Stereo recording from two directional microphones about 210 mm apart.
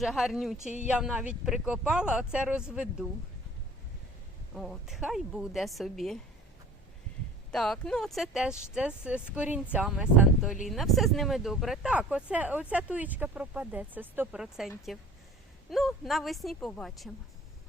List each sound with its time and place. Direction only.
0.0 s speech: centre (ahead or behind)
4.5 s speech: centre (ahead or behind)
7.5 s speech: centre (ahead or behind)